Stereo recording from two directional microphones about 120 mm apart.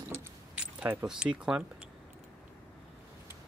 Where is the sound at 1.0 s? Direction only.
5° right (ahead or behind).